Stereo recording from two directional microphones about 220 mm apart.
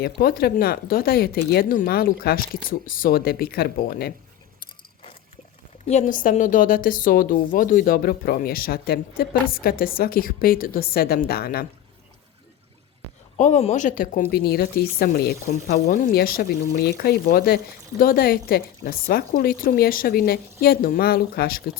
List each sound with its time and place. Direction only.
0.0 s speech: 40° left (ahead or behind)
5.8 s a woman's voice: 30° left (ahead or behind)
13.3 s a woman's voice: 35° left (ahead or behind)